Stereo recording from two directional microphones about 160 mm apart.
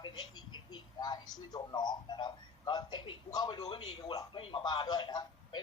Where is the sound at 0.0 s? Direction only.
30° left (ahead or behind).